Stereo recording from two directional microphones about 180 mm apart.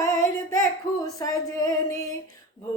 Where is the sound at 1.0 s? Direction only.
20° left (ahead or behind).